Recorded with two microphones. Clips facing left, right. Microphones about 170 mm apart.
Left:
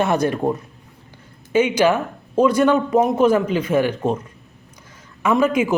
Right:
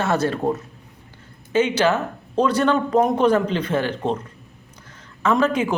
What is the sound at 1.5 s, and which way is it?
Speech, 15° left (ahead or behind).